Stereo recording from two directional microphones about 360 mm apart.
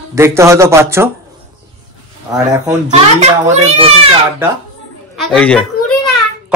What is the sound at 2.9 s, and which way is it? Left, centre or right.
A child's voice, centre.